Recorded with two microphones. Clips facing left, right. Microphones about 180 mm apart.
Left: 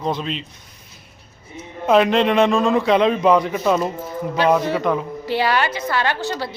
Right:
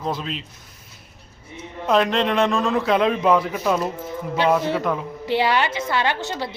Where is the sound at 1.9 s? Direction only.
5° left (ahead or behind).